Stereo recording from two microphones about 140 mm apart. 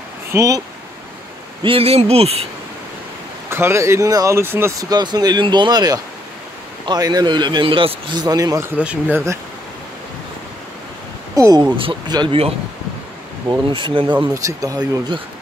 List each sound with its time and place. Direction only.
0.3 s speech: 20° right (ahead or behind)
1.6 s speech: 40° right (ahead or behind)
3.4 s speech: 20° right (ahead or behind)
11.3 s speech: 25° right (ahead or behind)
11.7 s speech: 35° right (ahead or behind)
13.5 s speech: 35° right (ahead or behind)
14.3 s speech: 25° right (ahead or behind)